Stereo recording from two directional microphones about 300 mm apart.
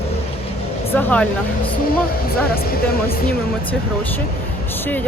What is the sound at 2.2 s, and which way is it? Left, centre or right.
Speech, left.